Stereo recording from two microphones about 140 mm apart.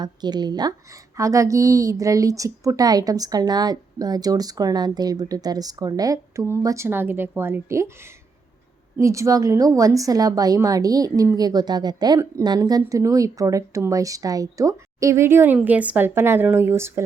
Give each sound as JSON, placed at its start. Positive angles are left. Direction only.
{"t": 0.0, "sound": "a woman's voice", "side_deg": -30}
{"t": 9.0, "sound": "a woman's voice", "side_deg": -20}